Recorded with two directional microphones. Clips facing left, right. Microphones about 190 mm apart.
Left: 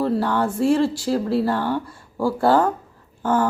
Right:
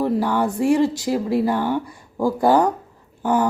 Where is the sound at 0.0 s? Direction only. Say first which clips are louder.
Right 1 dB; 15° right (ahead or behind).